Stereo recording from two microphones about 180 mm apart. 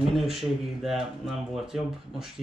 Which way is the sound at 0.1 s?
Centre (ahead or behind).